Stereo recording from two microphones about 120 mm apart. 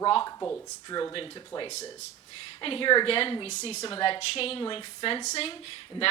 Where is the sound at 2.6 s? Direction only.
45° left (ahead or behind); by 3.8 s 60° left (ahead or behind).